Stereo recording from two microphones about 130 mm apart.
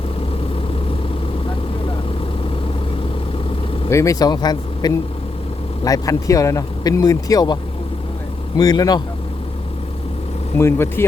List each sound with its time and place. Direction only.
3.8 s speech: 25° left (ahead or behind)
10.6 s speech: 20° left (ahead or behind)